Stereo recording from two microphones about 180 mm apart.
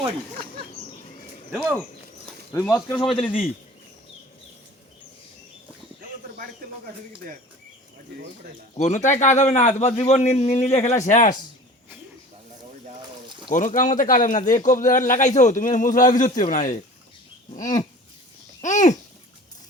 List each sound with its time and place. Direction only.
2.5 s speech: 15° left (ahead or behind)
6.0 s bird: 55° right (ahead or behind)
8.8 s a man's voice: 40° left (ahead or behind)
13.5 s speech: 45° left (ahead or behind)
18.6 s a sound: 40° left (ahead or behind)